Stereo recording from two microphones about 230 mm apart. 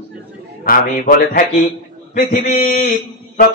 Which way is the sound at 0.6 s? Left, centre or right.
Left.